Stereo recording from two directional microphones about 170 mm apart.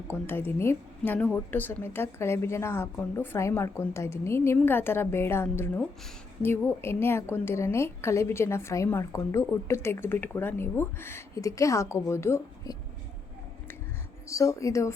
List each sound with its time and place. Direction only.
0.1 s a woman's voice: 15° left (ahead or behind)
14.3 s a woman's voice: 20° left (ahead or behind)